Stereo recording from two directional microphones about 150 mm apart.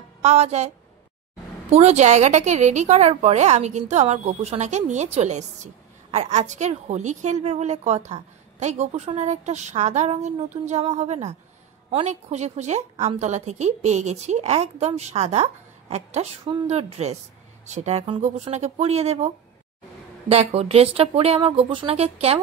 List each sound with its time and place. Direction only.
0.2 s a woman's voice: 45° right (ahead or behind)
1.7 s a woman's voice: 45° right (ahead or behind)